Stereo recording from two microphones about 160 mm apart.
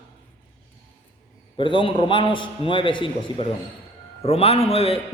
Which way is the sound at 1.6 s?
30° left (ahead or behind).